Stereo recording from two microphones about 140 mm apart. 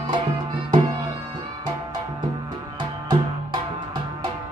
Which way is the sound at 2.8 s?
30° right (ahead or behind).